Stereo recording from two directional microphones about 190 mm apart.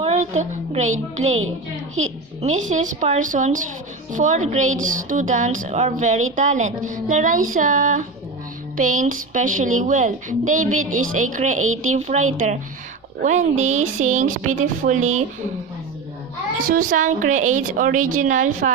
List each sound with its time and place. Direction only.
0.0 s speech: 35° right (ahead or behind)
16.6 s speech: 45° right (ahead or behind)